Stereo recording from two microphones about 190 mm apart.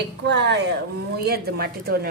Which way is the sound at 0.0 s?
65° right (ahead or behind).